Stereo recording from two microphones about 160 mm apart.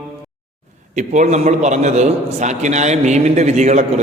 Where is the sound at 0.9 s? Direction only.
50° right (ahead or behind).